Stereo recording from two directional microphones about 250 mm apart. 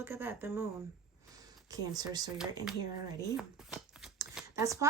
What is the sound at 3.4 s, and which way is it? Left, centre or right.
Speech, centre.